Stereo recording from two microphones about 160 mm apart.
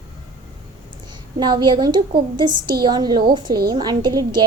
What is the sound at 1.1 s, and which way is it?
A woman's voice, 30° right (ahead or behind).